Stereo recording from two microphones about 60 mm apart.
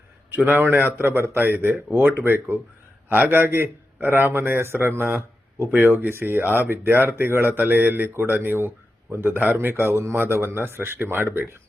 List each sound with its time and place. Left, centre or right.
0.3 s speech: right